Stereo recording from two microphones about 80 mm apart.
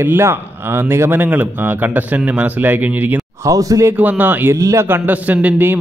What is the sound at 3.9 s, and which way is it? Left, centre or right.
Speech, right.